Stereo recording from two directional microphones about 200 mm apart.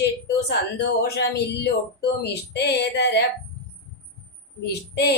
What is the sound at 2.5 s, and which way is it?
Speech, 55° left (ahead or behind).